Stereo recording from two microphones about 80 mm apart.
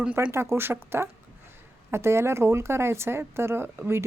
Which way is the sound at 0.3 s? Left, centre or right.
Right.